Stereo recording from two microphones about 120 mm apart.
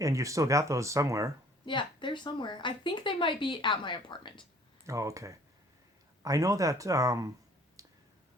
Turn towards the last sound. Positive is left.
turn(degrees=-30)  # may be behind; listen again after turning